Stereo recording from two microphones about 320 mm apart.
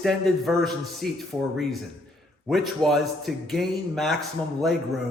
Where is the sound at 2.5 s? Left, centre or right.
Centre.